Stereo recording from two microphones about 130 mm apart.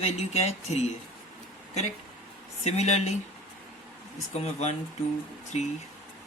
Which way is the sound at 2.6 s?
55° left (ahead or behind).